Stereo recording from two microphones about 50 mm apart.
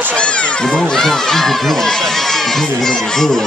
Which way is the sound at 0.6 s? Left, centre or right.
Centre.